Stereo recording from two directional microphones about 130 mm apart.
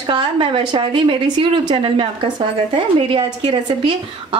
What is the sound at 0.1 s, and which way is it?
A woman's voice, 40° right (ahead or behind).